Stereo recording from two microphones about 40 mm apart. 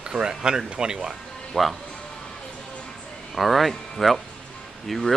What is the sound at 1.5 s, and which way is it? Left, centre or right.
Speech, left.